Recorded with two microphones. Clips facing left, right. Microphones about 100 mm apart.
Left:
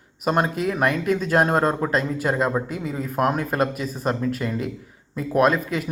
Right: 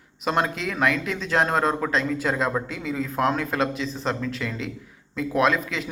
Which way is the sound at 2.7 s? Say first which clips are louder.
Left 1 dB; 45° left (ahead or behind).